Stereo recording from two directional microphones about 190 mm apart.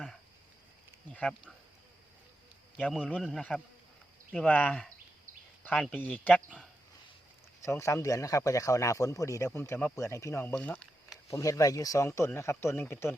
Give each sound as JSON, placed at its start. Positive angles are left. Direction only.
{"t": 2.8, "sound": "a man's voice", "side_deg": 5}
{"t": 7.6, "sound": "speech", "side_deg": 15}